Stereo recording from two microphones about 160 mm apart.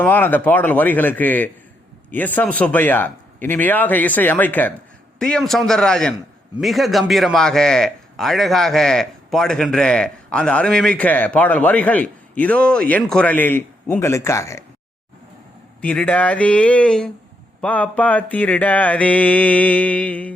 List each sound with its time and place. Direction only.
0.0 s mantra: 10° left (ahead or behind)
5.2 s a man's voice: 5° left (ahead or behind)
15.8 s mantra: 10° left (ahead or behind)